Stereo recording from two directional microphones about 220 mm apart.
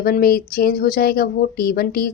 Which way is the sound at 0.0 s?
45° left (ahead or behind).